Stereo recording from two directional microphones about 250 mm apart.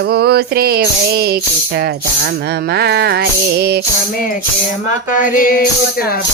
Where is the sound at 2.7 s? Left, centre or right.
Right.